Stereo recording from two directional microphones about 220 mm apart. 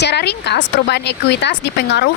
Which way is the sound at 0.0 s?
50° left (ahead or behind).